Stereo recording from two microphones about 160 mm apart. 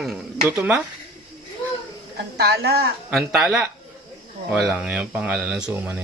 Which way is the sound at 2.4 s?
90° right.